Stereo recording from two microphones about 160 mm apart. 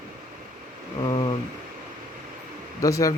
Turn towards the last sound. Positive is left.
turn(degrees=20)  # may be behind; listen again after turning